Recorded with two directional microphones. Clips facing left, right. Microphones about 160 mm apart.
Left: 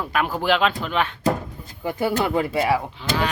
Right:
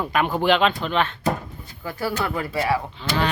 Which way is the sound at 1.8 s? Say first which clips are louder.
Left 4 dB; 20° left (ahead or behind).